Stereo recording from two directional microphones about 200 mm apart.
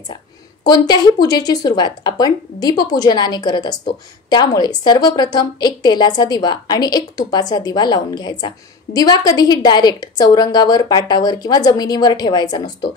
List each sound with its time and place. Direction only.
0.7 s speech: 20° left (ahead or behind)